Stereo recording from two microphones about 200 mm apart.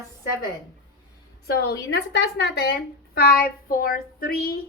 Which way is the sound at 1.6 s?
55° left (ahead or behind).